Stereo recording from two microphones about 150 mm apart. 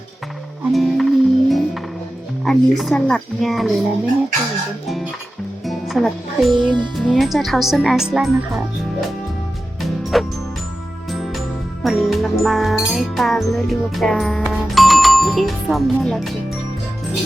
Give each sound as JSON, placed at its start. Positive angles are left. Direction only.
{"t": 0.7, "sound": "music", "side_deg": 0}
{"t": 2.4, "sound": "speech", "side_deg": 0}
{"t": 5.6, "sound": "music", "side_deg": 0}
{"t": 6.5, "sound": "music", "side_deg": -30}
{"t": 7.1, "sound": "speech", "side_deg": 0}
{"t": 9.8, "sound": "music", "side_deg": 0}